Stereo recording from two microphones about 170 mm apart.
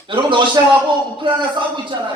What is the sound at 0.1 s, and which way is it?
A man's voice, 30° right (ahead or behind).